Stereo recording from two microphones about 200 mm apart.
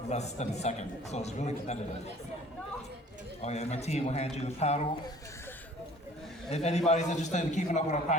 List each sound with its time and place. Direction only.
0.1 s a man's voice: 35° left (ahead or behind)
3.4 s a man's voice: 35° left (ahead or behind)
6.5 s a man's voice: 35° left (ahead or behind)